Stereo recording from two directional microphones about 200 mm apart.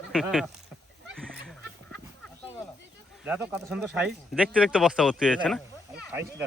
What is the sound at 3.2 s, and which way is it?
Speech, 10° right (ahead or behind).